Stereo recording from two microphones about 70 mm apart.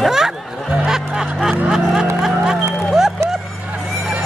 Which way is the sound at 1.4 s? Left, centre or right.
Centre.